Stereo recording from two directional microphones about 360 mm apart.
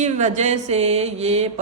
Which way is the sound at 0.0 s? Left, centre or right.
Centre.